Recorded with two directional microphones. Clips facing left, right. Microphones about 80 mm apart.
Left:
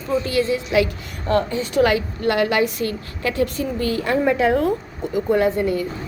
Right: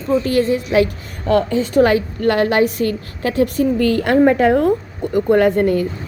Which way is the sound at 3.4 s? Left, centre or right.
Right.